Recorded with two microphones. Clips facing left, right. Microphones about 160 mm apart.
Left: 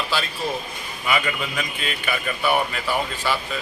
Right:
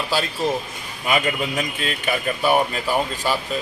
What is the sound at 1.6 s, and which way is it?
Speech, 40° right (ahead or behind).